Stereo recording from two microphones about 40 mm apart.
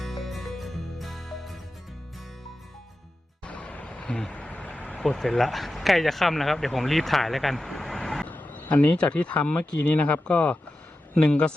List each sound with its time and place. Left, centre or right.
0.0 s music: centre
3.4 s vehicle: left
4.3 s a sound: left
5.0 s speech: centre
8.3 s vehicle: left
9.0 s speech: left
11.1 s speech: left